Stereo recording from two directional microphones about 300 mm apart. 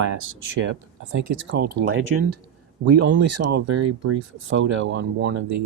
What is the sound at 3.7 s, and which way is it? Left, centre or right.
Speech, right.